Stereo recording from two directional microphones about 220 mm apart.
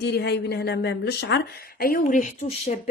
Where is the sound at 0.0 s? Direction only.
50° left (ahead or behind).